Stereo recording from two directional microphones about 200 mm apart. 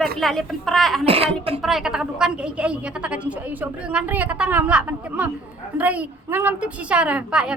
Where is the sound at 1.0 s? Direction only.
30° right (ahead or behind).